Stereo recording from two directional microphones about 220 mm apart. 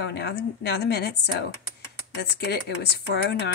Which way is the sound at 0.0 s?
50° left (ahead or behind).